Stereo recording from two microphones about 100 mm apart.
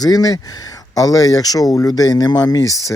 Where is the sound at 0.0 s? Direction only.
40° left (ahead or behind).